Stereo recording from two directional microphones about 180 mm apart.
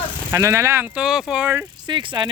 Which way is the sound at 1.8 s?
25° right (ahead or behind).